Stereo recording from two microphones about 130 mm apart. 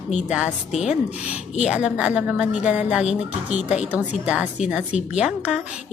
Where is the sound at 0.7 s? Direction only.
60° left (ahead or behind).